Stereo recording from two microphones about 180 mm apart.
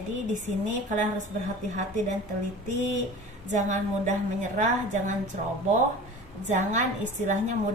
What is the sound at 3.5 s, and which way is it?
A woman's voice, 40° right (ahead or behind).